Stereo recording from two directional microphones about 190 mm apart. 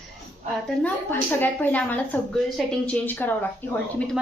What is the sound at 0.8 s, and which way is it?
A woman's voice, 10° left (ahead or behind).